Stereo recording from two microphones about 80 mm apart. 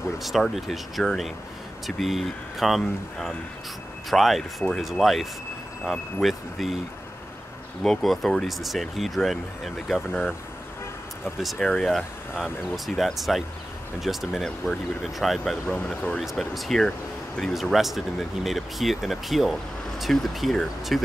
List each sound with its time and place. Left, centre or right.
0.2 s speech: centre
7.8 s speech: centre
11.6 s speech: centre
15.9 s speech: centre
16.2 s speech: centre